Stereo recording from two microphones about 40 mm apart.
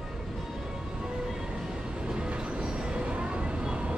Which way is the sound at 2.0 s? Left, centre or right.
Right.